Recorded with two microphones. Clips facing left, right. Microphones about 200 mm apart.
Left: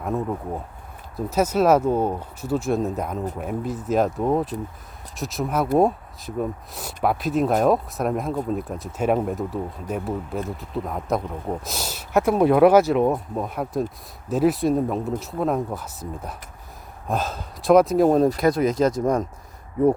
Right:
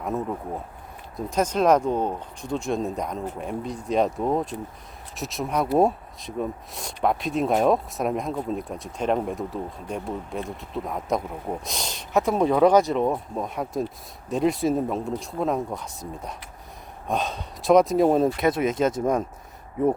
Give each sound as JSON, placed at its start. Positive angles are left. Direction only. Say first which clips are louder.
{"t": 0.0, "sound": "speech", "louder": "left 2 dB", "side_deg": 0}
{"t": 18.7, "sound": "speech", "louder": "left 2 dB", "side_deg": -25}